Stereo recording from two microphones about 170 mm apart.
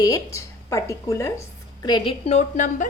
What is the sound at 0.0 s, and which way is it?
A woman's voice, 20° left (ahead or behind).